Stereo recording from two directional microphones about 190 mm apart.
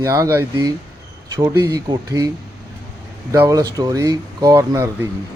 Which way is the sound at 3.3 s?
15° right (ahead or behind).